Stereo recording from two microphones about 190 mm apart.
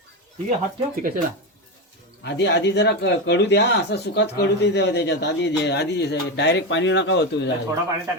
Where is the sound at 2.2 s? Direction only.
65° left (ahead or behind).